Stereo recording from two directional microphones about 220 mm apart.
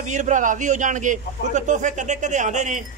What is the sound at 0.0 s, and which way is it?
A man's voice, 35° right (ahead or behind).